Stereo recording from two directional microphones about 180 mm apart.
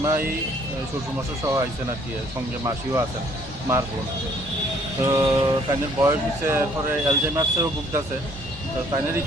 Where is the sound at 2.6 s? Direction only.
15° right (ahead or behind).